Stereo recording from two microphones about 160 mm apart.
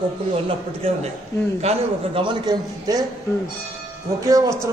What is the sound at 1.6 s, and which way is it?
A man's voice, 35° right (ahead or behind).